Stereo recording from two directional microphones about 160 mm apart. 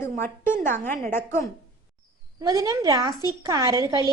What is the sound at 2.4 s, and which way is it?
A woman's voice, 20° right (ahead or behind).